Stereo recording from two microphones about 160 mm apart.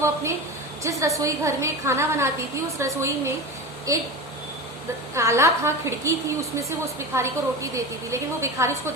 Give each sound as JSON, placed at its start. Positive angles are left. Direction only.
{"t": 0.0, "sound": "a woman's voice", "side_deg": -15}
{"t": 5.1, "sound": "a woman's voice", "side_deg": -20}